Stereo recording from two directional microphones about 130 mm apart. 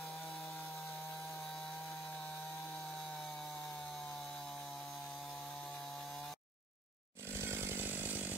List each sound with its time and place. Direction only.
7.2 s chainsaw: 15° right (ahead or behind)